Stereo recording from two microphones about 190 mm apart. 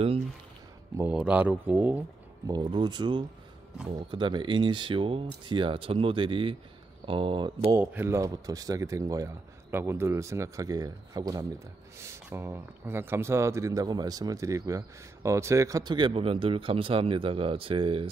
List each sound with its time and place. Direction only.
0.9 s a man's voice: 10° right (ahead or behind)
2.5 s speech: 25° right (ahead or behind)
7.8 s a man's voice: 10° right (ahead or behind); by 18.1 s 30° right (ahead or behind)